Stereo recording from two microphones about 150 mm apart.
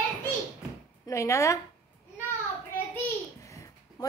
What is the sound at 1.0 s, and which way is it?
Speech, 20° left (ahead or behind).